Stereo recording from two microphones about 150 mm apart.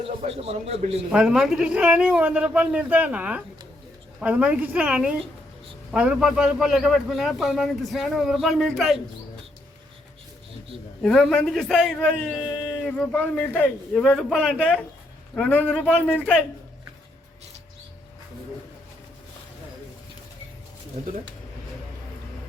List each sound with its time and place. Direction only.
0.3 s a man's voice: 40° right (ahead or behind)
1.1 s a man's voice: 5° right (ahead or behind)
11.0 s a man's voice: 5° left (ahead or behind)